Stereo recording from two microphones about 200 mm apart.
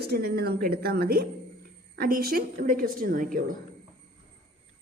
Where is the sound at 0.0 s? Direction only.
55° right (ahead or behind).